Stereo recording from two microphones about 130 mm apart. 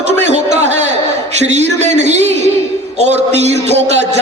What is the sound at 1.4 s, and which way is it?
A man's voice, 60° right (ahead or behind).